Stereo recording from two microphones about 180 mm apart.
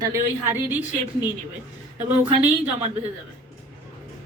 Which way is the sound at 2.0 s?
10° right (ahead or behind).